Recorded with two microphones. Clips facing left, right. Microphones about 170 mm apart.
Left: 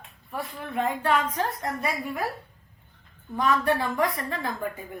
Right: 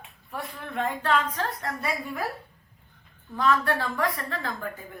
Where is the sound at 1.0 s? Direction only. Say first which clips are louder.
Right 1 dB; 15° left (ahead or behind).